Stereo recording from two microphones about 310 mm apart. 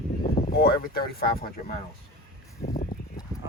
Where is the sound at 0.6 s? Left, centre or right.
Left.